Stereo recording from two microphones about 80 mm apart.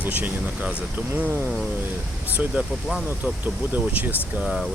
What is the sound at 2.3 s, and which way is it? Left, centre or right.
Speech, centre.